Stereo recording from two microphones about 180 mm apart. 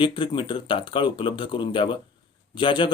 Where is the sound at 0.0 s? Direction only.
25° left (ahead or behind).